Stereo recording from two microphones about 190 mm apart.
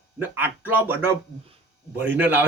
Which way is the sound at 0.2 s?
10° right (ahead or behind).